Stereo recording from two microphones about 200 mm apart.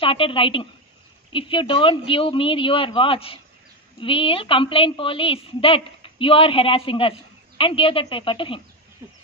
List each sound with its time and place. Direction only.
0.0 s a woman's voice: 25° left (ahead or behind)